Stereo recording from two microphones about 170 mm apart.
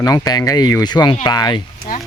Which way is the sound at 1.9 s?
55° left (ahead or behind).